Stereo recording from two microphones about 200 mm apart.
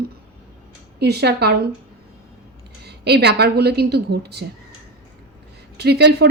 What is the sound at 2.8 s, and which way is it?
A woman's voice, 55° right (ahead or behind).